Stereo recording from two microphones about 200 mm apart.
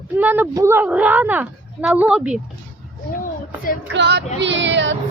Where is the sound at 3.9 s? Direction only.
60° right (ahead or behind).